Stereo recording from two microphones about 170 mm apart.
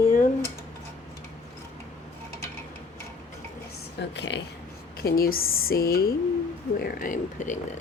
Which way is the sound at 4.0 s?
90° left.